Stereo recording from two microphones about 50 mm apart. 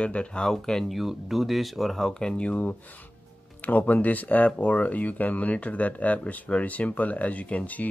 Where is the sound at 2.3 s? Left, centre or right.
Left.